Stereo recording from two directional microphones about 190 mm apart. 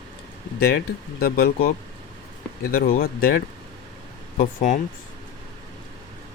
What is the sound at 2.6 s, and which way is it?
Speech, 50° left (ahead or behind).